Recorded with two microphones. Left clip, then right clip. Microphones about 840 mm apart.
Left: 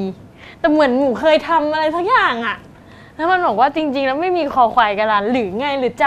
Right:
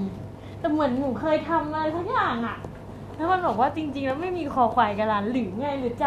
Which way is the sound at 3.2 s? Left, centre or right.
Left.